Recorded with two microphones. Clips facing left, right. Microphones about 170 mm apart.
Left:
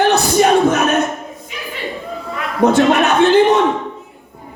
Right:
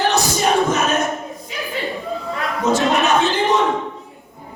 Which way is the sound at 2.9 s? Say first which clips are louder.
Left 6 dB; 65° left (ahead or behind).